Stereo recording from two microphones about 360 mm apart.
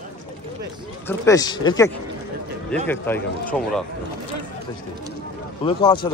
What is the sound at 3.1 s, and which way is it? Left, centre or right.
Speech, centre.